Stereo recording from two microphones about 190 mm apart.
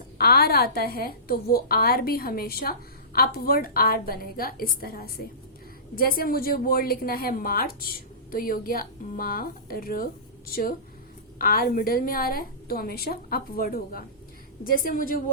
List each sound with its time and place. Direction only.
0.2 s a woman's voice: 55° left (ahead or behind)